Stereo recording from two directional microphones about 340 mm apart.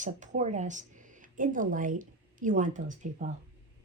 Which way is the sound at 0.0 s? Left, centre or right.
Right.